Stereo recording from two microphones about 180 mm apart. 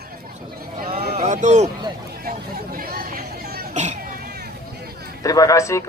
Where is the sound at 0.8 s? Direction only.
55° right (ahead or behind).